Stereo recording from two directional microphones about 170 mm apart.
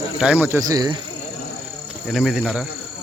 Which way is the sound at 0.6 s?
20° right (ahead or behind).